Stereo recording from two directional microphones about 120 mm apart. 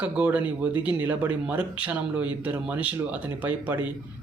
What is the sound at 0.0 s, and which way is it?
Speech, 10° right (ahead or behind).